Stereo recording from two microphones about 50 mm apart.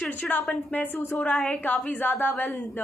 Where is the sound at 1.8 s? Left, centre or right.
Left.